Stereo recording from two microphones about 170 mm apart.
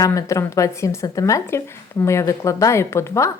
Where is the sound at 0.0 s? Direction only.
20° left (ahead or behind).